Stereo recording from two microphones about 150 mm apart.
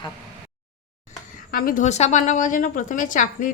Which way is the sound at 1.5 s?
65° left (ahead or behind).